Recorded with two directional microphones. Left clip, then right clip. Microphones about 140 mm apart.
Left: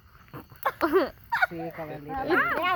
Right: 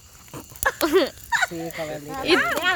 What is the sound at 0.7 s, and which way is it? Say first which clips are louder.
Speech: right 4 dB; centre (ahead or behind).